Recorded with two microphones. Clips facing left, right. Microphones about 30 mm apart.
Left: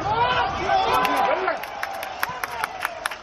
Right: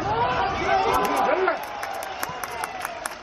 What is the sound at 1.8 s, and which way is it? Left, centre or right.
Applause, left.